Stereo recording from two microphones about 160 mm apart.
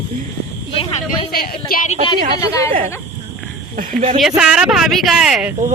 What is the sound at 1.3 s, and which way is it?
Speech, 70° left (ahead or behind).